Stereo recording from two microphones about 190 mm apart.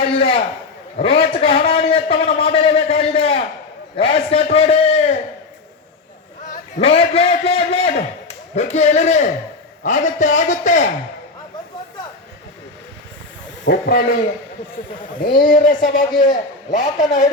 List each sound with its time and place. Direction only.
0.0 s a sound: 30° left (ahead or behind)
0.9 s a man's voice: 30° left (ahead or behind)
6.5 s a man's voice: 35° left (ahead or behind)
13.7 s speech: 50° left (ahead or behind)
15.4 s a man's voice: 45° left (ahead or behind)